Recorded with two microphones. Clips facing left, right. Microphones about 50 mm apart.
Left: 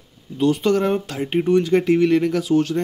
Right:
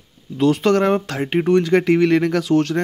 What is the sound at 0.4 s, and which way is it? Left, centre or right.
Speech, right.